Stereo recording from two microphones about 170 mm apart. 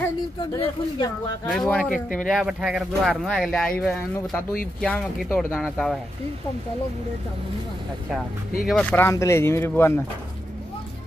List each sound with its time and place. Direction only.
0.6 s speech: 25° left (ahead or behind)
1.6 s speech: 5° left (ahead or behind)
5.4 s speech: 5° right (ahead or behind)
8.6 s speech: 10° left (ahead or behind)